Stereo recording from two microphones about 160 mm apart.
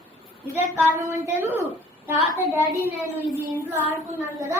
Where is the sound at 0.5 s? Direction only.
15° right (ahead or behind).